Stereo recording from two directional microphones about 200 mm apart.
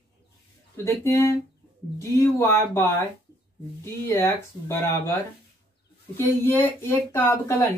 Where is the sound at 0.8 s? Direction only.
15° left (ahead or behind).